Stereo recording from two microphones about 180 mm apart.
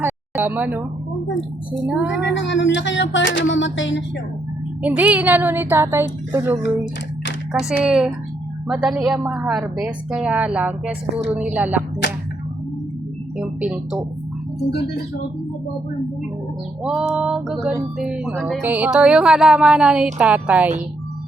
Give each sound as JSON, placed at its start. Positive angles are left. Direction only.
{"t": 0.0, "sound": "speech", "side_deg": -10}
{"t": 1.9, "sound": "speech", "side_deg": -10}
{"t": 2.3, "sound": "speech", "side_deg": 85}
{"t": 4.8, "sound": "speech", "side_deg": -5}
{"t": 7.9, "sound": "music", "side_deg": -5}
{"t": 9.8, "sound": "speech", "side_deg": -5}
{"t": 12.0, "sound": "a sound", "side_deg": 70}
{"t": 13.6, "sound": "music", "side_deg": -5}
{"t": 16.8, "sound": "music", "side_deg": -5}
{"t": 20.1, "sound": "speech", "side_deg": -10}